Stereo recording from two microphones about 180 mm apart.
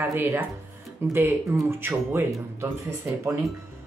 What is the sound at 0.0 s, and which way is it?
Speech, 10° right (ahead or behind).